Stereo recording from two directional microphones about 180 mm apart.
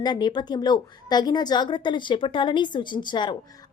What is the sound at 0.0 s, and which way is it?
A woman's voice, 25° left (ahead or behind).